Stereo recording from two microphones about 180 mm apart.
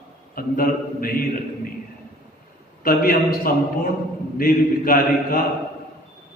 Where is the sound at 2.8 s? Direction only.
55° left (ahead or behind).